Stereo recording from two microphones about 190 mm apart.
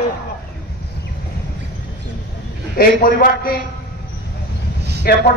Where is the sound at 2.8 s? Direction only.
50° left (ahead or behind).